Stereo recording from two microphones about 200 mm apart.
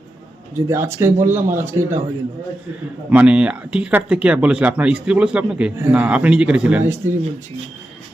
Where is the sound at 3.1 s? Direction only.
5° right (ahead or behind).